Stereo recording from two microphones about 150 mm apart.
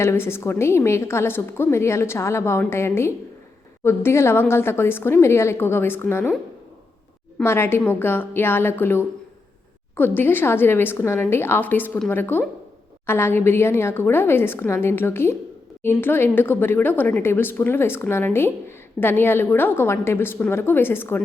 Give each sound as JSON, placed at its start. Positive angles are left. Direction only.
{"t": 0.0, "sound": "a woman's voice", "side_deg": 15}
{"t": 7.4, "sound": "a woman's voice", "side_deg": 15}